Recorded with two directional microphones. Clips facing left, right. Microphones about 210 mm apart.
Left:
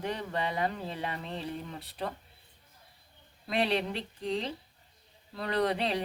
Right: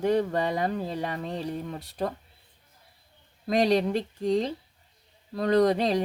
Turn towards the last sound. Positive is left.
turn(degrees=-40)  # may be behind; listen again after turning